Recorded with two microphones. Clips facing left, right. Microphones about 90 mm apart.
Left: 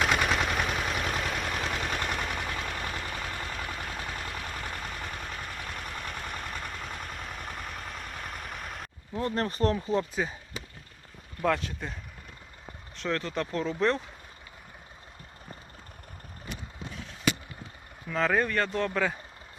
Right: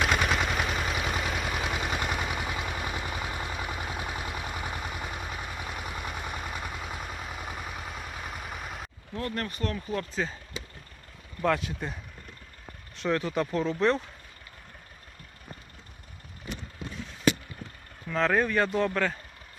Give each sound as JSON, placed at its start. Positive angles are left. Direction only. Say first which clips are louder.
{"t": 0.0, "sound": "vehicle", "louder": "even", "side_deg": 0}
{"t": 9.3, "sound": "speech", "louder": "left 8 dB", "side_deg": 30}
{"t": 9.7, "sound": "speech", "louder": "left 4 dB", "side_deg": 25}
{"t": 11.4, "sound": "speech", "louder": "right 1 dB", "side_deg": 0}
{"t": 18.1, "sound": "speech", "louder": "right 1 dB", "side_deg": 0}